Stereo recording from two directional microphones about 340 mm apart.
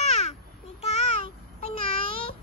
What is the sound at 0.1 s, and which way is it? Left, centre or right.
Babbling, centre.